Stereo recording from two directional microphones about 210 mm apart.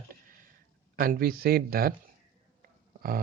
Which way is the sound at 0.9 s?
45° right (ahead or behind).